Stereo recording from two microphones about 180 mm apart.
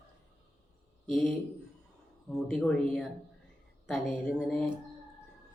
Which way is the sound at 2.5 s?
Centre (ahead or behind).